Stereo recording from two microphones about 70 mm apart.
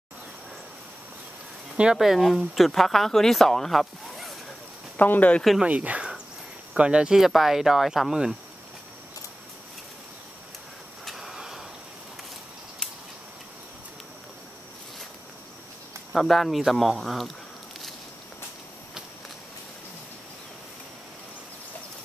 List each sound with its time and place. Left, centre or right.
1.8 s speech: centre
4.9 s speech: left
5.6 s speech: centre
11.1 s a sound: centre
16.1 s speech: centre